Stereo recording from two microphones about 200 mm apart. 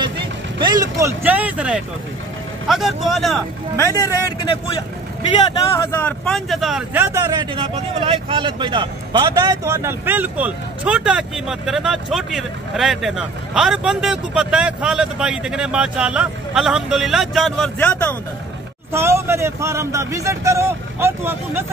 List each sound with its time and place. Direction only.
0.6 s speech: 20° right (ahead or behind); by 3.4 s centre (ahead or behind)
3.7 s a man's voice: 15° left (ahead or behind)
5.7 s speech: 15° left (ahead or behind); by 7.4 s 15° right (ahead or behind)
7.5 s speech: 30° right (ahead or behind); by 18.1 s 10° left (ahead or behind)
18.9 s speech: 15° right (ahead or behind)